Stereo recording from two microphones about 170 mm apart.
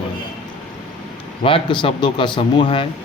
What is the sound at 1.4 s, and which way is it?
Speech, 30° left (ahead or behind).